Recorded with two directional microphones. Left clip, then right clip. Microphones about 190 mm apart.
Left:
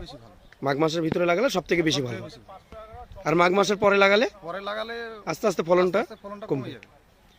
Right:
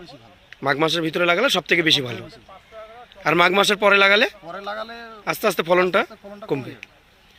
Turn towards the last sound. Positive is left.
turn(degrees=5)  # may be behind; listen again after turning